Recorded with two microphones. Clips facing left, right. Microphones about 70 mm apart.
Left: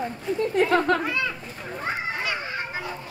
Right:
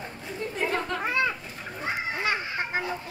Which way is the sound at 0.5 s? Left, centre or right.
Left.